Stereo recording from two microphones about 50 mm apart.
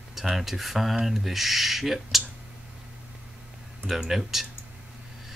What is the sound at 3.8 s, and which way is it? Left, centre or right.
Speech, centre.